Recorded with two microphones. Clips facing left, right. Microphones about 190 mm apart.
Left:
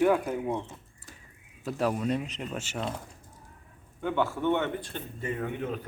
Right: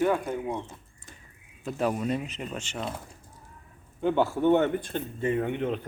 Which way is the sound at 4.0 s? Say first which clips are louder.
Right 4 dB; 35° right (ahead or behind).